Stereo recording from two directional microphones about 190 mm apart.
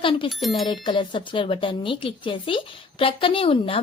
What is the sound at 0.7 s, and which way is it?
A woman's voice, 25° left (ahead or behind).